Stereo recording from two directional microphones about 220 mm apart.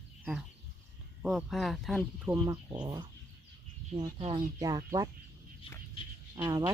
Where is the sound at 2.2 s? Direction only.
15° right (ahead or behind).